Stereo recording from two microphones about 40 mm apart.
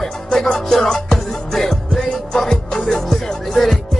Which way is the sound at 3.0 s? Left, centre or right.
Centre.